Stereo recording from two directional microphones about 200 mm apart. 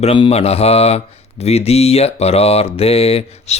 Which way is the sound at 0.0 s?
30° left (ahead or behind).